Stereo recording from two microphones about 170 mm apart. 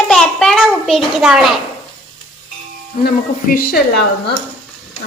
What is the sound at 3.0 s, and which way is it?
Speech, 60° left (ahead or behind).